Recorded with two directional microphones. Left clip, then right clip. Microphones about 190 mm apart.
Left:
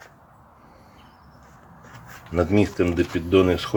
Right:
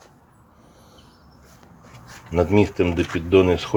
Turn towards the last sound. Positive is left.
turn(degrees=-5)  # may be behind; listen again after turning